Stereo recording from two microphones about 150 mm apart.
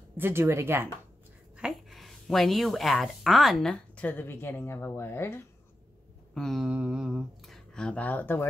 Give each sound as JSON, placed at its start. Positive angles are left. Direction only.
{"t": 0.2, "sound": "a woman's voice", "side_deg": -15}
{"t": 1.6, "sound": "a woman's voice", "side_deg": 0}
{"t": 6.3, "sound": "speech", "side_deg": 0}